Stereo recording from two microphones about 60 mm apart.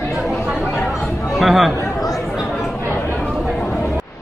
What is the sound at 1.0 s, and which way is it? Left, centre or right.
Chatter, centre.